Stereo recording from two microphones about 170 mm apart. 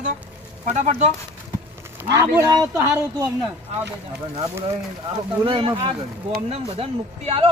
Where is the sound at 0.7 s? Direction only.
45° right (ahead or behind).